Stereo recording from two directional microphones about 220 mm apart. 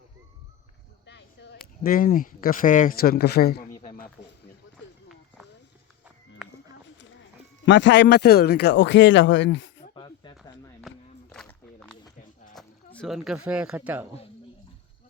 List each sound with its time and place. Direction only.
1.0 s speech: 50° left (ahead or behind)
3.8 s a sound: 40° left (ahead or behind)
7.6 s speech: 55° left (ahead or behind)
9.9 s snake: 20° left (ahead or behind)
10.3 s a sound: centre (ahead or behind)
12.5 s speech: 5° left (ahead or behind)